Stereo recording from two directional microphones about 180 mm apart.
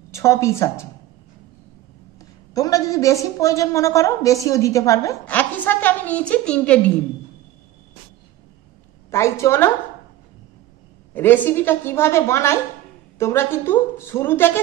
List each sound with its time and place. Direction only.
0.1 s a woman's voice: 15° left (ahead or behind)
2.5 s a woman's voice: 20° left (ahead or behind)
9.1 s a woman's voice: 15° left (ahead or behind)
11.1 s a woman's voice: 10° left (ahead or behind)